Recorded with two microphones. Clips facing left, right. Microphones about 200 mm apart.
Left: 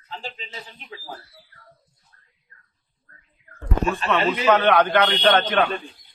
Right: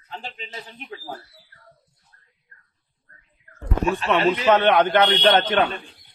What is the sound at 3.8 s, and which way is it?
Speech, 10° right (ahead or behind).